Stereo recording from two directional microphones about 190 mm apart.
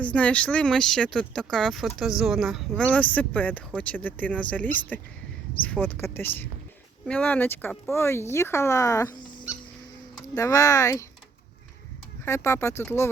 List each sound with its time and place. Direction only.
0.0 s speech: 5° left (ahead or behind)
12.2 s speech: 15° left (ahead or behind)